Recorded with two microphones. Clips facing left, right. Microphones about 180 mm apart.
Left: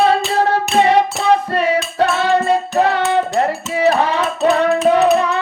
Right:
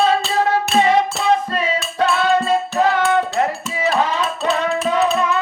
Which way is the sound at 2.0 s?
65° left (ahead or behind).